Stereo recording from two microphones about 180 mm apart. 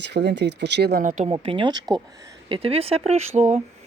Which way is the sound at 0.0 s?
70° right (ahead or behind).